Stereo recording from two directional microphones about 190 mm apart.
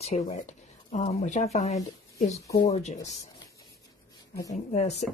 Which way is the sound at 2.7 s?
35° left (ahead or behind).